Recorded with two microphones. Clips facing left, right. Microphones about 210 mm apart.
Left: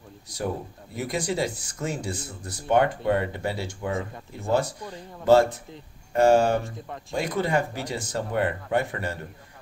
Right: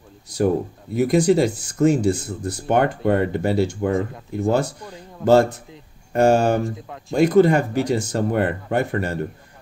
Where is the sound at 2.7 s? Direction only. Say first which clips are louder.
Right 3 dB; 50° right (ahead or behind).